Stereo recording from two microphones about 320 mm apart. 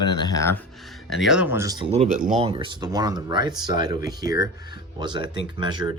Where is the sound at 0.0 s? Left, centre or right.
Centre.